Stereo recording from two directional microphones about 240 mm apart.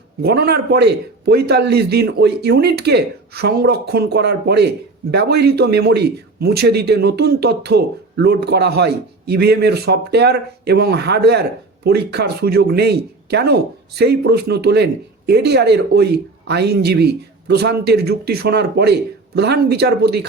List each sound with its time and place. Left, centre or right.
0.2 s a man's voice: right